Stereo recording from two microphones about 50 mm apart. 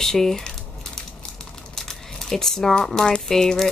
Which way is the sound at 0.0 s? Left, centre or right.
Centre.